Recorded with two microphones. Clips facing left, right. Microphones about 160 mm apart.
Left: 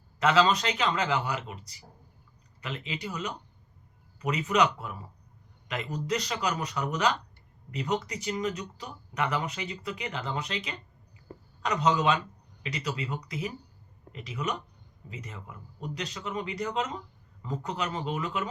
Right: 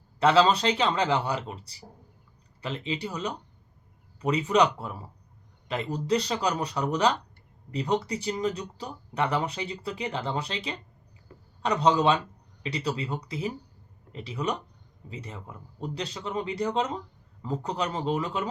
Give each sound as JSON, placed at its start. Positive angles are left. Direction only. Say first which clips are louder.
{"t": 0.2, "sound": "speech", "louder": "right 3 dB", "side_deg": -30}
{"t": 11.3, "sound": "a sound", "louder": "left 6 dB", "side_deg": 40}
{"t": 11.6, "sound": "speech", "louder": "right 3 dB", "side_deg": -30}